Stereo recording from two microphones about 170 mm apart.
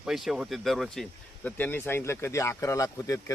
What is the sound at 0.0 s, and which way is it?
A man's voice, 5° right (ahead or behind).